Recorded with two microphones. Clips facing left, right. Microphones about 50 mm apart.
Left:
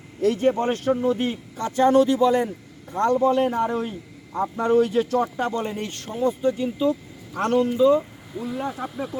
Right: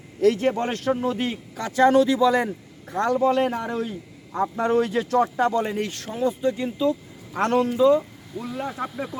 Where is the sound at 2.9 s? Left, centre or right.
Right.